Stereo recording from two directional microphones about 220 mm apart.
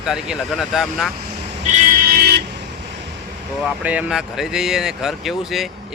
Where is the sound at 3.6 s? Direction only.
5° right (ahead or behind).